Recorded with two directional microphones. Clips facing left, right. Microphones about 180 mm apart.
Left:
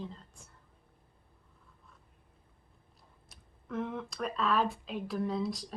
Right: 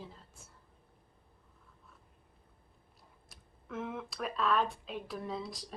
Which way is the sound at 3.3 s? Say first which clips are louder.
Left 4 dB; centre (ahead or behind).